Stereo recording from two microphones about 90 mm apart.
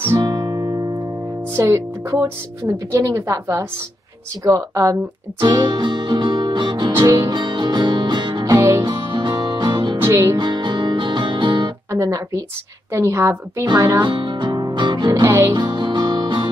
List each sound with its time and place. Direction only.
0.2 s music: 50° right (ahead or behind)
1.6 s a woman's voice: 35° right (ahead or behind)
5.4 s music: 55° right (ahead or behind)
7.0 s music: 40° right (ahead or behind); by 8.5 s 55° right (ahead or behind)
8.5 s music: 35° right (ahead or behind)
8.8 s music: 55° right (ahead or behind)
9.9 s music: 25° right (ahead or behind)
10.3 s music: 55° right (ahead or behind)
11.9 s a woman's voice: 35° right (ahead or behind)
14.0 s music: 65° right (ahead or behind)
15.2 s music: 25° right (ahead or behind)
15.5 s music: 55° right (ahead or behind)